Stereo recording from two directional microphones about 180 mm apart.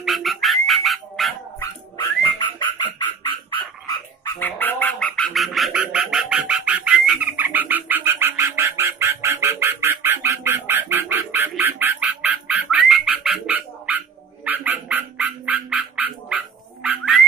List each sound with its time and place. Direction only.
0.0 s frog: centre (ahead or behind)
1.6 s bird: 25° left (ahead or behind)
4.4 s frog: 10° left (ahead or behind); by 17.2 s 5° right (ahead or behind)